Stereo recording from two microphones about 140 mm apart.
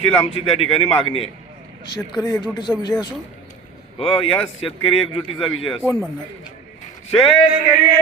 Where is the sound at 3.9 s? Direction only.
40° left (ahead or behind).